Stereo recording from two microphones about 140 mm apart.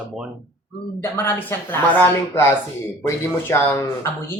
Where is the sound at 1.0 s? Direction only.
20° left (ahead or behind).